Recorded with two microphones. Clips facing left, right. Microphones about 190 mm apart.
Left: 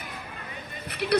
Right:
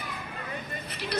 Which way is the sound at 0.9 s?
60° left (ahead or behind).